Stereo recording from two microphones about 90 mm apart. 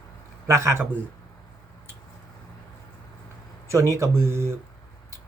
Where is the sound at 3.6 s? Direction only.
35° right (ahead or behind).